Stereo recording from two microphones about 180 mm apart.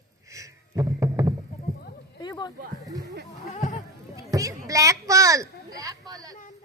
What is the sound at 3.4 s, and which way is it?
Sheep, 40° left (ahead or behind).